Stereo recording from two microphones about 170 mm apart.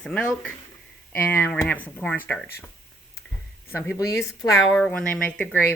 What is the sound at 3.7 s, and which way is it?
Speech, 10° left (ahead or behind).